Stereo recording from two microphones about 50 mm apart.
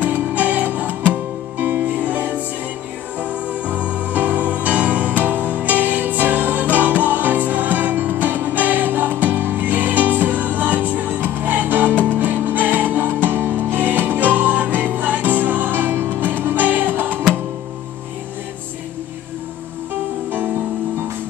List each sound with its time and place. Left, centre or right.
0.0 s music: right
20.2 s music: right